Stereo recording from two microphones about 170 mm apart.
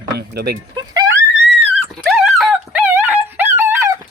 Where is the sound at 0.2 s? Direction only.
70° right (ahead or behind).